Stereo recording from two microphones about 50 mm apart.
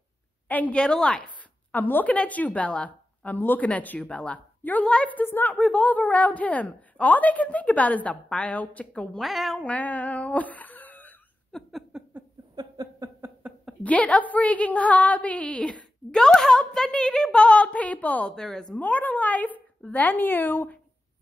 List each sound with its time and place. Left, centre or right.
0.5 s a woman's voice: left
2.0 s a woman's voice: left
3.3 s a woman's voice: left
4.8 s a woman's voice: left
5.1 s a woman's voice: left
9.2 s speech: centre
9.6 s speech: left
11.5 s a sound: centre
11.9 s a sound: centre
13.2 s a sound: right
13.8 s a woman's voice: left; by 17.4 s centre
17.4 s a woman's voice: left
18.3 s a woman's voice: centre
18.8 s a woman's voice: left